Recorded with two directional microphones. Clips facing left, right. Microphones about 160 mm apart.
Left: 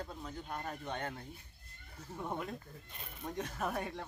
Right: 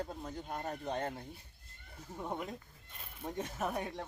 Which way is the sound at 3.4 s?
5° right (ahead or behind).